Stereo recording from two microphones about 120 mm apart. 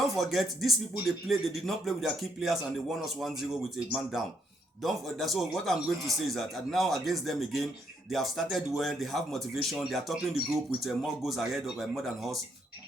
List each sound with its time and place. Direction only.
0.0 s speech: centre (ahead or behind)
4.8 s speech: centre (ahead or behind)